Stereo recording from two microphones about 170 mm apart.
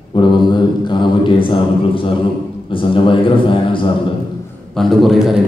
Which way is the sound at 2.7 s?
30° left (ahead or behind).